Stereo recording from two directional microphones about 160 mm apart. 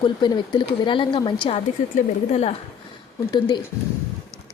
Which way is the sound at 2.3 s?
40° left (ahead or behind).